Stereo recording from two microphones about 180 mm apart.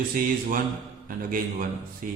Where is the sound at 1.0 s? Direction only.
50° right (ahead or behind).